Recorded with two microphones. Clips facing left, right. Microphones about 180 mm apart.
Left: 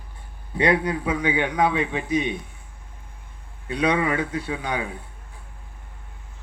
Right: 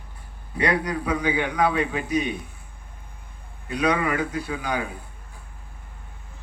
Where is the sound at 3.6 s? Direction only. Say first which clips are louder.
Left 1 dB; 25° left (ahead or behind).